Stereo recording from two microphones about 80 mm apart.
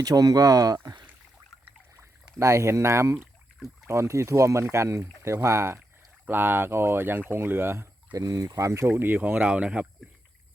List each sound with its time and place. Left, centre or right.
0.0 s speech: right
2.4 s speech: right
8.1 s speech: right; by 9.8 s centre